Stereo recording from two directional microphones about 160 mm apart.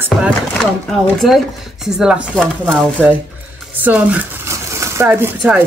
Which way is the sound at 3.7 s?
10° right (ahead or behind).